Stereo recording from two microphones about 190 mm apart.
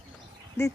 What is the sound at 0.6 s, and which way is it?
Speech, 10° left (ahead or behind).